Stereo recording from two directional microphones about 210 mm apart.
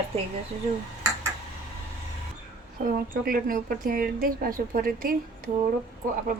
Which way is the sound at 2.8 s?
45° right (ahead or behind).